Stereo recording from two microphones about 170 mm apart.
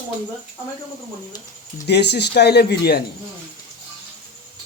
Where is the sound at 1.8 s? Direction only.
80° left.